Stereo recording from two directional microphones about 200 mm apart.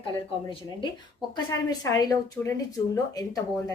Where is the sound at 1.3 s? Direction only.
20° left (ahead or behind).